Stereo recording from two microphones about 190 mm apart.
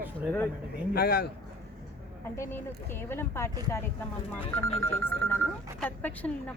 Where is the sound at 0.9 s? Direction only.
55° left (ahead or behind).